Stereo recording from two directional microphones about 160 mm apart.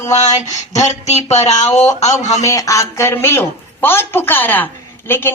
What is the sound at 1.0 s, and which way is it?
Speech, 45° left (ahead or behind).